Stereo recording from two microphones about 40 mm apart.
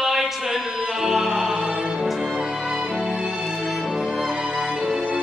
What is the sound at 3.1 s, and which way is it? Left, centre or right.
Music, centre.